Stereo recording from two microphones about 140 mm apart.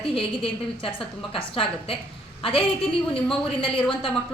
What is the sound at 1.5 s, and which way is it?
Speech, 40° left (ahead or behind).